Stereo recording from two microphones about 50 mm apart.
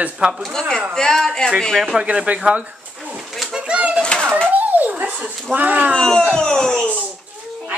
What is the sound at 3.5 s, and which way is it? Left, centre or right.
Pigeon, right.